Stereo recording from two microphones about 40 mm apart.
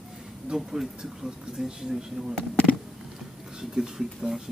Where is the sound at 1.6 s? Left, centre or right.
Centre.